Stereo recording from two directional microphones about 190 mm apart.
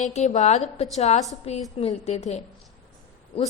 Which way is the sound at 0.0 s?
35° left (ahead or behind).